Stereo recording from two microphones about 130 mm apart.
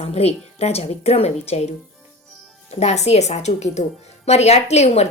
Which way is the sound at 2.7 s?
55° left (ahead or behind).